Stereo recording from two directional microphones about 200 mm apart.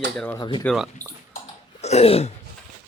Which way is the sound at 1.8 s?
30° left (ahead or behind).